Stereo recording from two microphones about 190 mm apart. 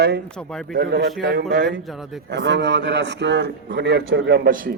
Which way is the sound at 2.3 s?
65° right (ahead or behind).